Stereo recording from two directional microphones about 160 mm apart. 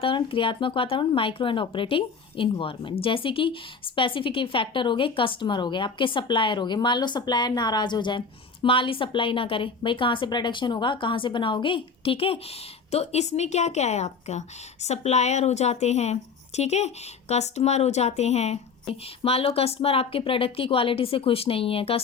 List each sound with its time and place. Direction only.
0.0 s a woman's voice: 30° left (ahead or behind)